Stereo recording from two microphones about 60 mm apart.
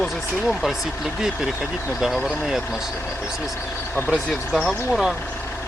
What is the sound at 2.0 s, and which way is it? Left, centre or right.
Speech, centre.